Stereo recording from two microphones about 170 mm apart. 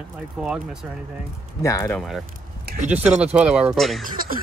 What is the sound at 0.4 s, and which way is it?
Speech, 5° right (ahead or behind).